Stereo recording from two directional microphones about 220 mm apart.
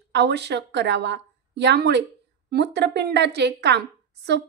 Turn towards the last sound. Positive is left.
turn(degrees=-50)  # may be behind; listen again after turning